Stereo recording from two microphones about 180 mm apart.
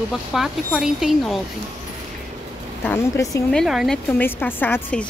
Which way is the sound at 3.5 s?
Centre (ahead or behind).